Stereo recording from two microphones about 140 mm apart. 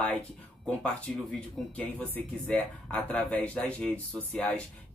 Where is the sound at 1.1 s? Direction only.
5° left (ahead or behind).